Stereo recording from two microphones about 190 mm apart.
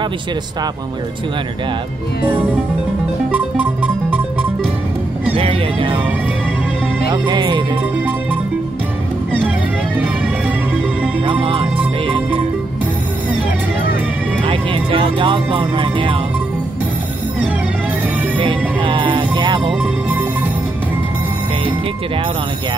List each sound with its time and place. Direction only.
3.3 s music: 5° right (ahead or behind)
5.3 s speech: 30° right (ahead or behind)
7.1 s speech: 25° right (ahead or behind)
11.2 s music: 25° right (ahead or behind)
14.4 s speech: 25° right (ahead or behind)
18.4 s music: 25° right (ahead or behind)
19.7 s music: 5° right (ahead or behind)